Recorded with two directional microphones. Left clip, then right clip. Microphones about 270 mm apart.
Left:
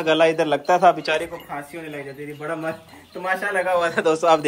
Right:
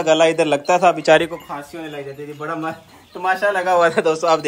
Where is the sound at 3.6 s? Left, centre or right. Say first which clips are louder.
Right 6 dB; right.